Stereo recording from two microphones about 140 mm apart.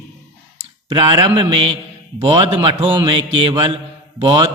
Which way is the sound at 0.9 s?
35° right (ahead or behind).